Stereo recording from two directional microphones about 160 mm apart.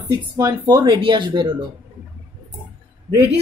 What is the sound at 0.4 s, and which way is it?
Speech, 25° right (ahead or behind).